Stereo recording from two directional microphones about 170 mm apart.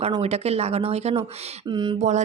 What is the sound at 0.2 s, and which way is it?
A woman's voice, 40° right (ahead or behind).